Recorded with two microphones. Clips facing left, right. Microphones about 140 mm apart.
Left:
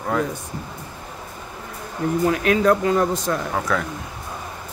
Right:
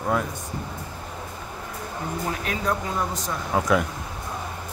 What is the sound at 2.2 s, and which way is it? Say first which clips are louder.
Speech: left 10 dB; 70° left (ahead or behind).